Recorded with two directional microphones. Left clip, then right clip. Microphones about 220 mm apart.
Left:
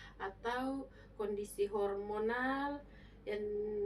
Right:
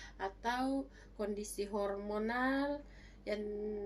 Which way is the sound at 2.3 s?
50° right (ahead or behind).